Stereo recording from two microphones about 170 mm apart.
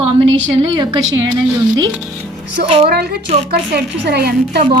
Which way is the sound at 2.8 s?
70° right (ahead or behind).